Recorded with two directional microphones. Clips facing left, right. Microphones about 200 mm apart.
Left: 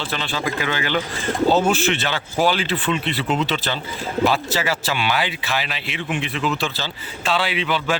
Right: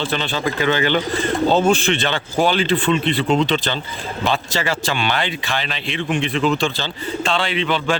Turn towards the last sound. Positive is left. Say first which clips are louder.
# right 2 dB
turn(degrees=5)  # may be behind; listen again after turning